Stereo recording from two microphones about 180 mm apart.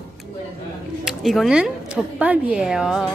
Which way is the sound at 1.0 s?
Centre (ahead or behind).